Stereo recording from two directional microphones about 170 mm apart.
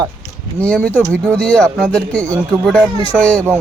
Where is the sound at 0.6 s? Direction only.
5° left (ahead or behind).